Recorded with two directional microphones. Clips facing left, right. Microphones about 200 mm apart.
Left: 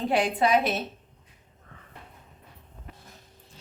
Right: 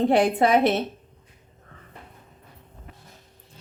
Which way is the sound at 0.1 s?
55° right (ahead or behind).